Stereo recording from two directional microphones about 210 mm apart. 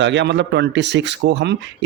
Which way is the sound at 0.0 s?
55° right (ahead or behind).